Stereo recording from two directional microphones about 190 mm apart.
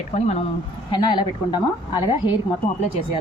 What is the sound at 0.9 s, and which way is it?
A woman's voice, 25° left (ahead or behind).